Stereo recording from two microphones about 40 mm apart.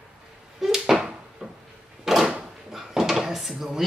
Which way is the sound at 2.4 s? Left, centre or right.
Centre.